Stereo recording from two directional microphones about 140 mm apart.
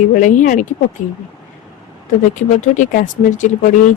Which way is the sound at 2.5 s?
65° left (ahead or behind).